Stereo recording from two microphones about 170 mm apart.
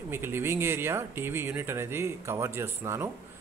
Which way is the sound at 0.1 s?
15° right (ahead or behind).